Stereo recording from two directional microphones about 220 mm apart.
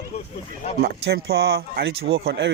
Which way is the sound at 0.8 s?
45° right (ahead or behind).